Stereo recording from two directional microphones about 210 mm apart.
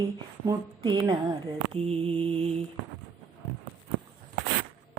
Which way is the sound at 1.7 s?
30° right (ahead or behind).